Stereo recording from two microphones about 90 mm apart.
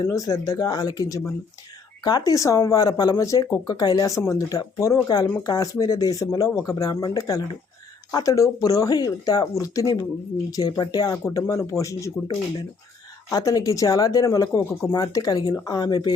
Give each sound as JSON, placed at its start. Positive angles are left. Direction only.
{"t": 0.0, "sound": "speech", "side_deg": 40}